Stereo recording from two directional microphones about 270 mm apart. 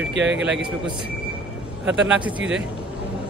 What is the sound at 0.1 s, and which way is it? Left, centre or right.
Speech, right.